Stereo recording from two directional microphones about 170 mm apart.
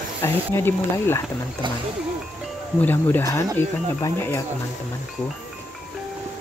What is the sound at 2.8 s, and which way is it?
Speech, 10° left (ahead or behind).